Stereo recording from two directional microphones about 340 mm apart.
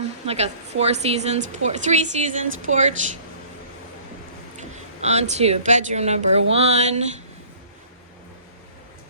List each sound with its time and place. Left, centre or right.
0.3 s a woman's voice: centre
5.0 s a woman's voice: centre